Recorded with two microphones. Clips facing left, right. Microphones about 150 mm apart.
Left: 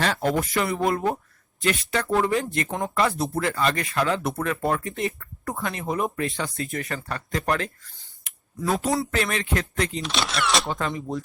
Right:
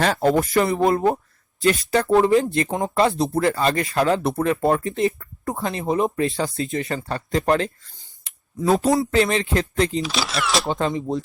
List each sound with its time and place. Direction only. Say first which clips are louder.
0.0 s speech: right 5 dB; 35° right (ahead or behind)
0.7 s speech: right 5 dB; 30° right (ahead or behind)
2.6 s speech: right 4 dB; 20° right (ahead or behind)
3.3 s speech: right 5 dB; 35° right (ahead or behind)
9.1 s speech: right 6 dB; 25° right (ahead or behind)
10.0 s speech: right 2 dB; centre (ahead or behind)
10.7 s speech: right 5 dB; 25° right (ahead or behind)